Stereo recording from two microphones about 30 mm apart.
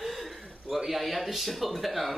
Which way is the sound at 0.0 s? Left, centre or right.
Centre.